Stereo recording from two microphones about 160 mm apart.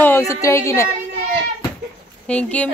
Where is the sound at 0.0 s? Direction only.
15° left (ahead or behind).